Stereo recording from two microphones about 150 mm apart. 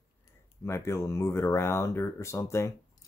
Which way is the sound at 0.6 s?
15° left (ahead or behind).